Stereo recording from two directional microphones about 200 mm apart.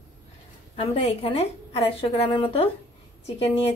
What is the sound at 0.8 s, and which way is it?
A woman's voice, 30° left (ahead or behind).